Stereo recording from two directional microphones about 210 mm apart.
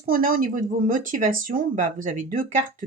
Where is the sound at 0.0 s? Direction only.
40° right (ahead or behind).